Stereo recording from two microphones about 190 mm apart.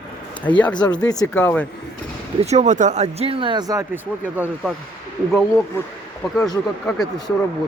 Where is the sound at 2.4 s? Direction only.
35° right (ahead or behind); by 4.7 s 10° right (ahead or behind).